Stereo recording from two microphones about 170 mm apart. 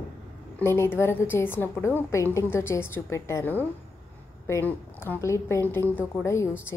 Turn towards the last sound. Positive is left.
turn(degrees=15)  # may be behind; listen again after turning